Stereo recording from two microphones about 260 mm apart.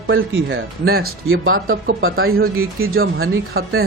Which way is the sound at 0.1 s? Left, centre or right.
Right.